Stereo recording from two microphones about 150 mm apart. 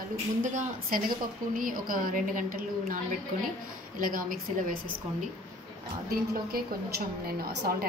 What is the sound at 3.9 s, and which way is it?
Speech, 65° right (ahead or behind).